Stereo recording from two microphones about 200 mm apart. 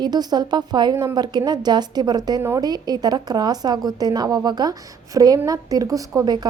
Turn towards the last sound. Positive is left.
turn(degrees=-20)  # may be behind; listen again after turning